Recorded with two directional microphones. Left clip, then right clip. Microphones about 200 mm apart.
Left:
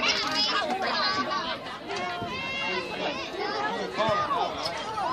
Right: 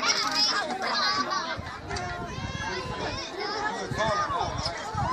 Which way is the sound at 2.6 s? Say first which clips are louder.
Even; 30° left (ahead or behind).